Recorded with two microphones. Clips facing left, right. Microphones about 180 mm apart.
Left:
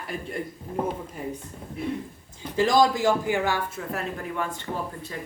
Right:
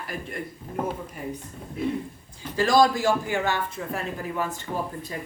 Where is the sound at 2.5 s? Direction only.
20° left (ahead or behind); by 5.1 s 10° right (ahead or behind).